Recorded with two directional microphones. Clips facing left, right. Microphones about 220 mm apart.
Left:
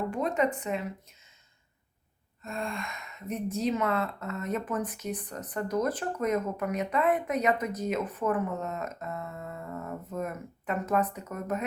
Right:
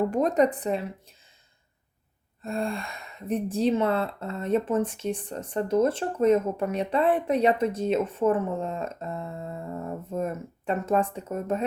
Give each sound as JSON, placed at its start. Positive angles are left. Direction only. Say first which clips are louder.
{"t": 0.1, "sound": "speech", "louder": "right 6 dB", "side_deg": -40}
{"t": 2.4, "sound": "speech", "louder": "right 6 dB", "side_deg": -35}